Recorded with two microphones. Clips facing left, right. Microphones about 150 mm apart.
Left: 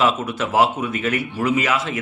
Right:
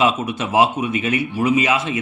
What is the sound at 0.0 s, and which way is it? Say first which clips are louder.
Speech: right 1 dB; 20° right (ahead or behind).